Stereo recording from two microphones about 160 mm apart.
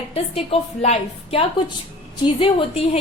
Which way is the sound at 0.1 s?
40° left (ahead or behind).